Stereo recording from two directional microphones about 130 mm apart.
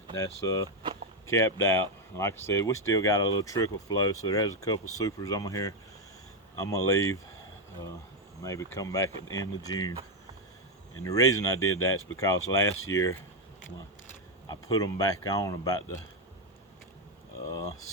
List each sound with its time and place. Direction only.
0.2 s speech: 25° left (ahead or behind)
8.4 s speech: 25° left (ahead or behind)
11.0 s speech: 25° left (ahead or behind)
14.4 s speech: 30° left (ahead or behind)